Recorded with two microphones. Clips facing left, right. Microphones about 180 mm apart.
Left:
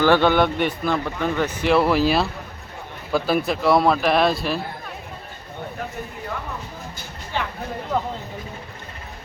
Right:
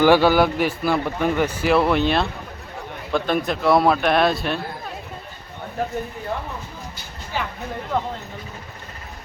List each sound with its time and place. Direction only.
0.0 s a man's voice: 10° right (ahead or behind)
1.6 s speech: centre (ahead or behind)
6.3 s speech: 30° right (ahead or behind)
7.3 s a man's voice: 5° right (ahead or behind)